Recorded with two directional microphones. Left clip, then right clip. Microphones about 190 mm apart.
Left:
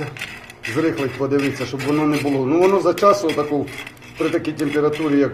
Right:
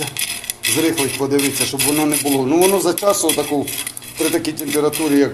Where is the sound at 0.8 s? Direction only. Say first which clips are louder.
Right 2 dB; 5° right (ahead or behind).